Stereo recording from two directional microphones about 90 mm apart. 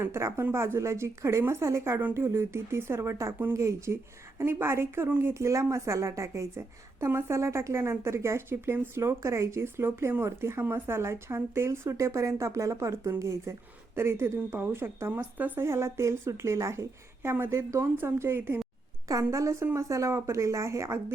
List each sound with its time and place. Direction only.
0.0 s a woman's voice: 30° right (ahead or behind)
19.0 s a woman's voice: 35° right (ahead or behind)